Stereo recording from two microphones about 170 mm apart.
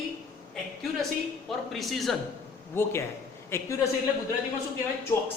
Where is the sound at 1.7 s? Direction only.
Centre (ahead or behind).